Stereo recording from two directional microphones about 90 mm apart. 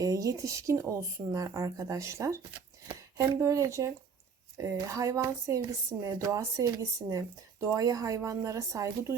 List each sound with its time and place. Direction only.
0.0 s speech: 40° right (ahead or behind)